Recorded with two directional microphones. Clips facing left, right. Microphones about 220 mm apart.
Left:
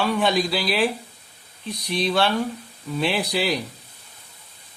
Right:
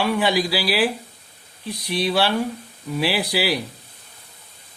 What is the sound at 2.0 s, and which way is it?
Speech, 5° right (ahead or behind).